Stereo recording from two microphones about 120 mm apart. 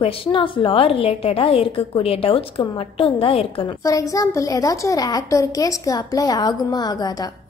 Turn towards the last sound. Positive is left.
turn(degrees=35)  # may be behind; listen again after turning